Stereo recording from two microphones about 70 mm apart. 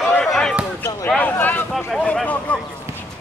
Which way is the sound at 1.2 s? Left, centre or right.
Left.